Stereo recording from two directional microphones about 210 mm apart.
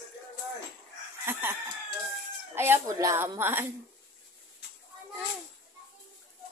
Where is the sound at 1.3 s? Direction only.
10° right (ahead or behind).